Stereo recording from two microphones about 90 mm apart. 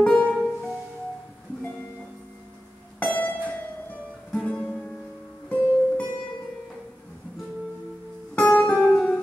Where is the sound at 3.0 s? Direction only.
15° left (ahead or behind).